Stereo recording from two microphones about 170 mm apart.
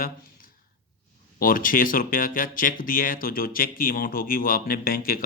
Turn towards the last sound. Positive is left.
turn(degrees=60)  # may be behind; listen again after turning